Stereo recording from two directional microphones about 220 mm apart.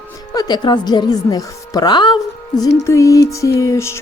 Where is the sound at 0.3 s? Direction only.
20° left (ahead or behind).